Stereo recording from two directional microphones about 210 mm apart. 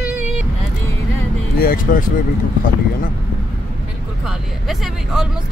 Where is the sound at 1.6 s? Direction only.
45° left (ahead or behind).